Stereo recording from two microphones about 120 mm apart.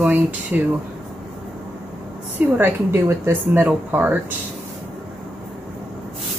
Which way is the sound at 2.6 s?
20° right (ahead or behind).